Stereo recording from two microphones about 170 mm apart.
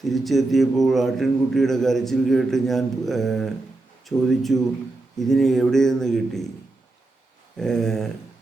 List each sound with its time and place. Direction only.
0.0 s a man's voice: centre (ahead or behind)
7.5 s a man's voice: 5° left (ahead or behind)